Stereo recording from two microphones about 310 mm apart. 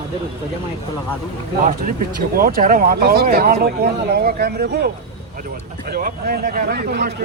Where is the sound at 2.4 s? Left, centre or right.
Right.